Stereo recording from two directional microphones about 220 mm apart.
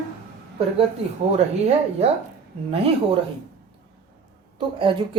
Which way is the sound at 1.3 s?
30° right (ahead or behind).